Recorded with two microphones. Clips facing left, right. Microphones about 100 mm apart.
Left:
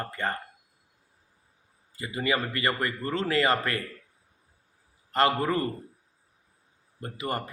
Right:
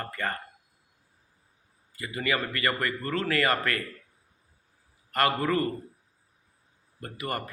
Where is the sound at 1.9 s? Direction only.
25° left (ahead or behind).